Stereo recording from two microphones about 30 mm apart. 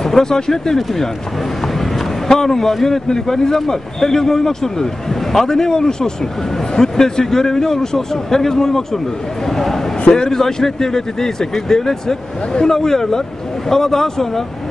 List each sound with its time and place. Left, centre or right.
0.0 s speech: centre
2.2 s a man's voice: centre
10.0 s a man's voice: left
10.3 s a man's voice: centre